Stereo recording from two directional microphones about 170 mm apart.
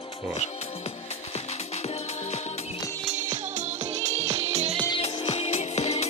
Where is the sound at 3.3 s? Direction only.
45° right (ahead or behind).